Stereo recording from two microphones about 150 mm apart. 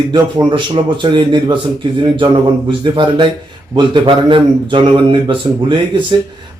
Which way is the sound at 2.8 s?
30° right (ahead or behind).